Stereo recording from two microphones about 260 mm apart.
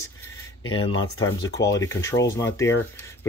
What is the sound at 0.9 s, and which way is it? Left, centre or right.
Speech, left.